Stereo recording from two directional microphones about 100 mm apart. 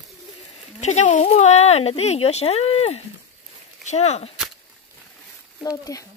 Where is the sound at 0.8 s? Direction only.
90° left.